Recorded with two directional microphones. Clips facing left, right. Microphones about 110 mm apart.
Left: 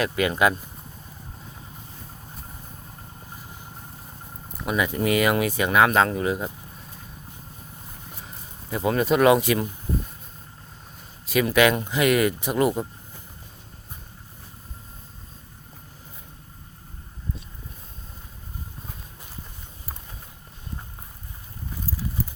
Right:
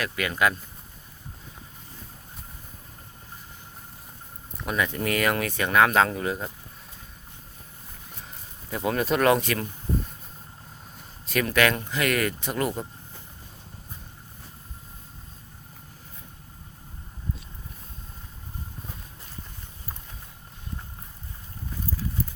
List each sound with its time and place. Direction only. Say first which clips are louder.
0.0 s speech: left 4 dB; 25° left (ahead or behind)
4.5 s speech: left 3 dB; 5° left (ahead or behind)
8.7 s speech: left 3 dB; centre (ahead or behind)
11.3 s speech: left 4 dB; 5° left (ahead or behind)